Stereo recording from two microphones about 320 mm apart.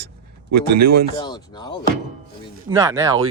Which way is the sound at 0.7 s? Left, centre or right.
Right.